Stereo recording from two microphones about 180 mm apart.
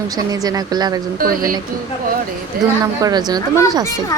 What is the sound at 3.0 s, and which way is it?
Speech, 20° right (ahead or behind).